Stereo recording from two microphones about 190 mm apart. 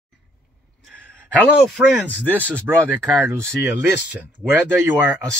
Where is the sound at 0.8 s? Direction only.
5° left (ahead or behind).